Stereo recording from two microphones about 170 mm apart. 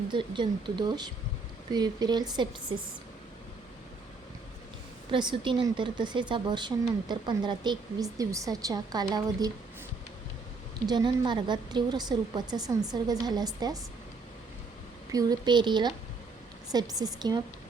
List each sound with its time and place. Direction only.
0.1 s a woman's voice: 30° right (ahead or behind)
5.1 s a woman's voice: 30° right (ahead or behind)
10.8 s a woman's voice: 25° right (ahead or behind)
15.1 s a woman's voice: 25° right (ahead or behind)